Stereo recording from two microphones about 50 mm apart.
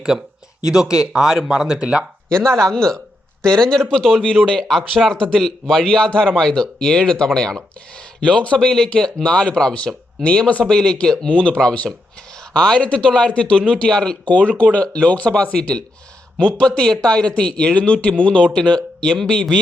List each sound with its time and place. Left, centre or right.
0.1 s speech: centre
2.3 s a man's voice: centre
10.2 s speech: left
10.6 s speech: centre